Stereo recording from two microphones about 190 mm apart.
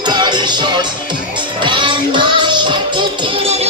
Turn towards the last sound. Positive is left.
turn(degrees=-30)  # may be behind; listen again after turning